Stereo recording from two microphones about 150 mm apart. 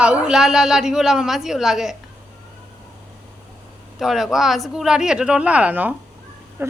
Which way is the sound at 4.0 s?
Centre (ahead or behind).